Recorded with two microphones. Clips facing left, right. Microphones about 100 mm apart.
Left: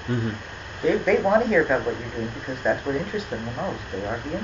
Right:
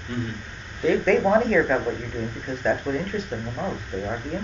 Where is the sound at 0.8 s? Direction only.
5° left (ahead or behind).